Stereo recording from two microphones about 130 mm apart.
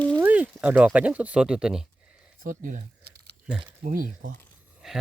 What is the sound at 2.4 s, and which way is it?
Speech, 85° right.